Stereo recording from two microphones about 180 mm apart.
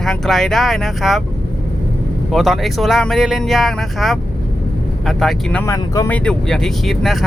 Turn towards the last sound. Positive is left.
turn(degrees=0)  # may be behind; listen again after turning